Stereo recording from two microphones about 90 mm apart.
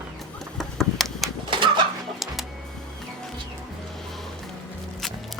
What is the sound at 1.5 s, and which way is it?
Bird, 65° right (ahead or behind).